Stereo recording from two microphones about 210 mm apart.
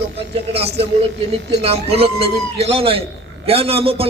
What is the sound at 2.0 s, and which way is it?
Speech, 50° right (ahead or behind).